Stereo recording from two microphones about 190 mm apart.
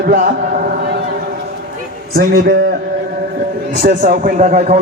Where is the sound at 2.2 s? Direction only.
55° right (ahead or behind).